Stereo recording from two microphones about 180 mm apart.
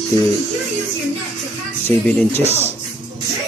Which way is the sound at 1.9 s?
10° left (ahead or behind).